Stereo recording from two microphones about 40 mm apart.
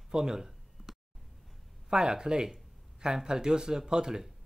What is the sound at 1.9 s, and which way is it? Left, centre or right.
Speech, centre.